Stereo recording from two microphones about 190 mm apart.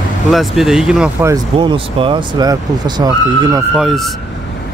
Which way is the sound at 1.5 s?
30° right (ahead or behind).